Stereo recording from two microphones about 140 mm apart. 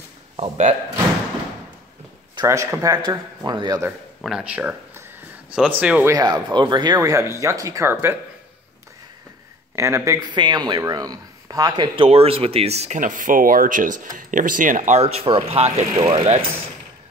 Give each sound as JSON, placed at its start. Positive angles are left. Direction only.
{"t": 0.4, "sound": "speech", "side_deg": -55}
{"t": 2.4, "sound": "speech", "side_deg": -20}
{"t": 4.2, "sound": "speech", "side_deg": -5}
{"t": 6.1, "sound": "speech", "side_deg": -30}
{"t": 9.8, "sound": "speech", "side_deg": -20}
{"t": 10.3, "sound": "speech", "side_deg": -30}